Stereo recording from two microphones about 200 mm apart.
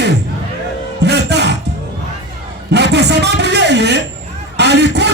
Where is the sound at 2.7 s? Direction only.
55° right (ahead or behind).